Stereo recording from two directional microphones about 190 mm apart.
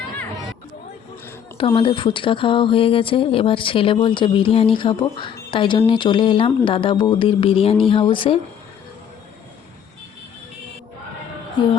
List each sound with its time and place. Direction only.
1.5 s speech: 30° left (ahead or behind)